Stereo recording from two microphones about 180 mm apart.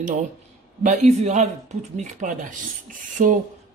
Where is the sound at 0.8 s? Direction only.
40° right (ahead or behind).